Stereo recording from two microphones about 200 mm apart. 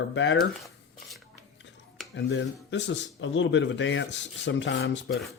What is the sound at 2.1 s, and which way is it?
A man's voice, 65° left (ahead or behind).